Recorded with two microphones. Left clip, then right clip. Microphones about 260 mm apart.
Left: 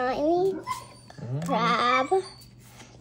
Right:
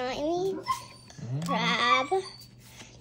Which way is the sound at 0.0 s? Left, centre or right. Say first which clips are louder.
Left 5 dB; centre.